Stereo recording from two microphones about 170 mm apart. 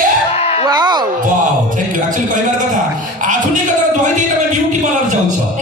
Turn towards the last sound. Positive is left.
turn(degrees=-45)  # may be behind; listen again after turning